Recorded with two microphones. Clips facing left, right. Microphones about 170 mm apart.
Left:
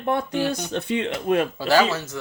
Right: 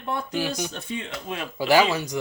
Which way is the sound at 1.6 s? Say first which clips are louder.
Even; 15° right (ahead or behind).